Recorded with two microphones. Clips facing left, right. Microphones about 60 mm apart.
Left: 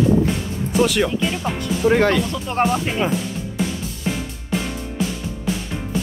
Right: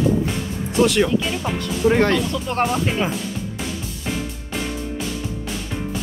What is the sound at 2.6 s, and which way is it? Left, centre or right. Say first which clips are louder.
Speech: left 2 dB; centre.